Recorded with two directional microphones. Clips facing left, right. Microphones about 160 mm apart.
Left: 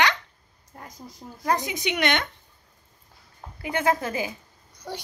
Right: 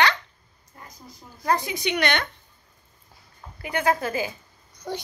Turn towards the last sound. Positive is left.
turn(degrees=-15)  # may be behind; listen again after turning